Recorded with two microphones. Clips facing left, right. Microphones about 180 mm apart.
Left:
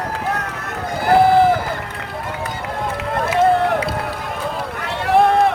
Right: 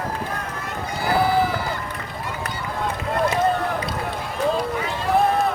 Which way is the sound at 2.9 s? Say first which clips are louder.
Left 4 dB; 75° left (ahead or behind).